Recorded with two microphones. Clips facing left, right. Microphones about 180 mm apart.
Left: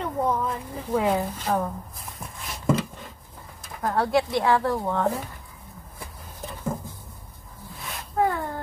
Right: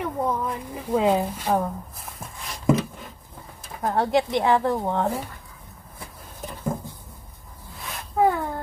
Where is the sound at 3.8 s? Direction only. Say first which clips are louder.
Right 1 dB; 20° right (ahead or behind).